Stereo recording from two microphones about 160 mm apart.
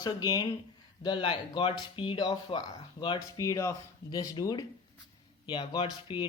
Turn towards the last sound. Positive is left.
turn(degrees=30)  # may be behind; listen again after turning